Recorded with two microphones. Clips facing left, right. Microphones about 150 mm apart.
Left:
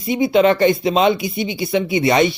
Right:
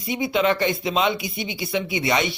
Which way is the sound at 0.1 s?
35° left (ahead or behind).